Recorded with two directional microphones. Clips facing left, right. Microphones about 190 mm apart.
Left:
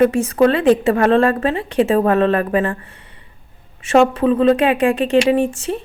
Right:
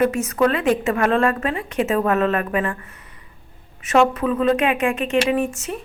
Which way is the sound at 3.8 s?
30° left (ahead or behind).